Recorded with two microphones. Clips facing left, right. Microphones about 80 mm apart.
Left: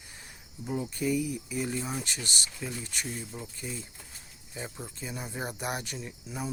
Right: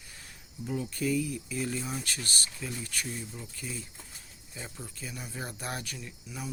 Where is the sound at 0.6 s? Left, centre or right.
Centre.